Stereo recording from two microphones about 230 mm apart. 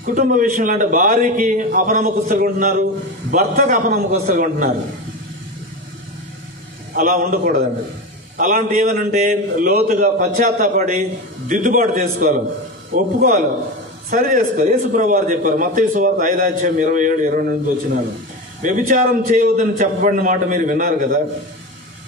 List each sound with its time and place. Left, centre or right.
0.0 s a man's voice: right
6.9 s a man's voice: right
18.6 s a man's voice: right